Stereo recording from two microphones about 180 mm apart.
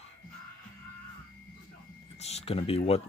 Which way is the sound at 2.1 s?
35° left (ahead or behind).